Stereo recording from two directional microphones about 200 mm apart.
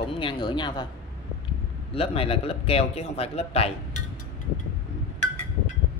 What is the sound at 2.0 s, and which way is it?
Speech, 30° left (ahead or behind).